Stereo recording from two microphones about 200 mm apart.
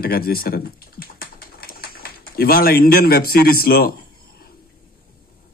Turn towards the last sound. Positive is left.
turn(degrees=50)  # may be behind; listen again after turning